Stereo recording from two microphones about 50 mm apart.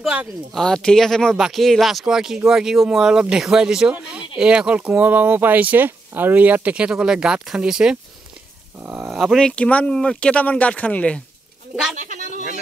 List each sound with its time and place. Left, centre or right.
0.5 s speech: centre; by 6.9 s right
6.9 s speech: centre
8.7 s speech: right
9.1 s speech: centre
9.4 s speech: left
10.3 s speech: left